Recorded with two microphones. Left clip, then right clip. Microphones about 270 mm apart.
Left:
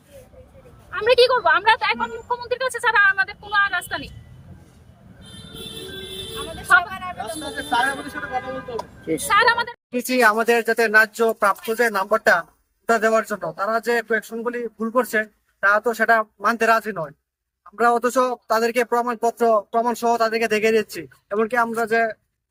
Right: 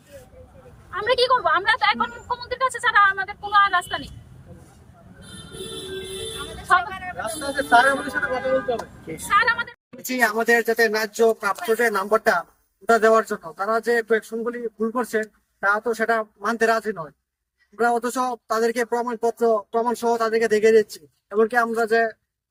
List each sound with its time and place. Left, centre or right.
0.9 s a woman's voice: centre
2.4 s vehicle: centre
7.2 s speech: centre
9.3 s a woman's voice: centre
10.3 s speech: centre